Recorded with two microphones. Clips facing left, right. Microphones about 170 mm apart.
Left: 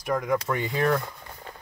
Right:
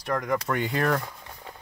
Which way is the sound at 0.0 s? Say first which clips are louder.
Left 1 dB; 5° left (ahead or behind).